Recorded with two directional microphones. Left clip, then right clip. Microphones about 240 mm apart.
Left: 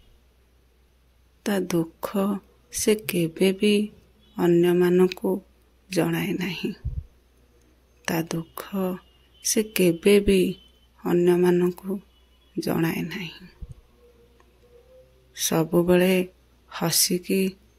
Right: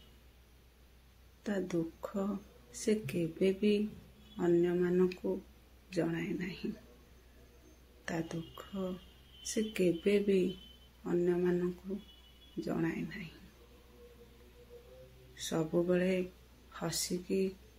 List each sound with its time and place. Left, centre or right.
1.4 s speech: left
8.0 s speech: left
15.3 s speech: left